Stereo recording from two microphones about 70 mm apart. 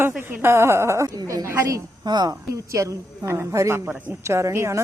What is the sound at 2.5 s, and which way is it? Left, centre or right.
A woman's voice, right.